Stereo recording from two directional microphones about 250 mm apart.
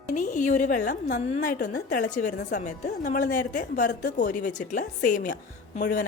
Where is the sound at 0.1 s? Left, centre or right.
Left.